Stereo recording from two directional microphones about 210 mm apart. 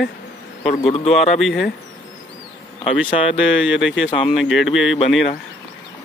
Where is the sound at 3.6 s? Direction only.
Centre (ahead or behind).